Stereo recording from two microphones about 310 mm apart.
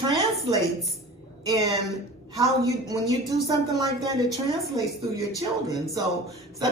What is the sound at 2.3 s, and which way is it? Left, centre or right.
Speech, centre.